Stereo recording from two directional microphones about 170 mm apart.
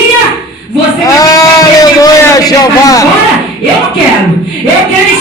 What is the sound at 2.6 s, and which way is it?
Speech, 20° left (ahead or behind).